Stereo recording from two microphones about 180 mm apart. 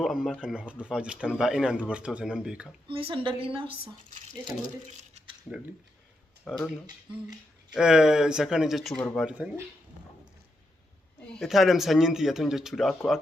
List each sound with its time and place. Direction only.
0.0 s speech: centre (ahead or behind)
2.8 s a woman's voice: 30° right (ahead or behind)
6.5 s speech: centre (ahead or behind)
7.7 s speech: 5° right (ahead or behind)
11.3 s speech: centre (ahead or behind)